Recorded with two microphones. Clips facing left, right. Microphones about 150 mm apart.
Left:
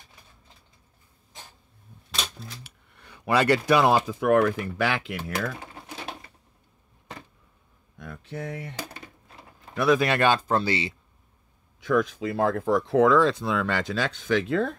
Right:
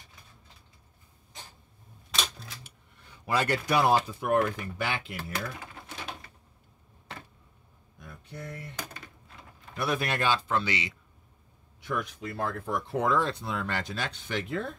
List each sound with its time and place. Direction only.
2.6 s speech: 70° left (ahead or behind); by 5.5 s 90° left
8.0 s a sound: 90° left
9.8 s speech: 90° left
10.3 s speech: 40° left (ahead or behind)
11.8 s speech: 90° left